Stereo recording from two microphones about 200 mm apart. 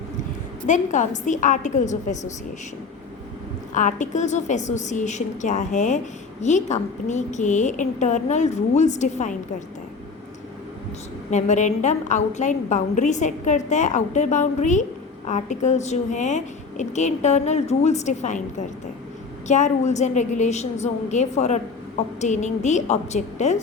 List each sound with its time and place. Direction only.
0.7 s a woman's voice: 40° left (ahead or behind)
3.8 s a woman's voice: 40° left (ahead or behind)
11.3 s a woman's voice: 35° left (ahead or behind)
19.5 s a woman's voice: 35° left (ahead or behind)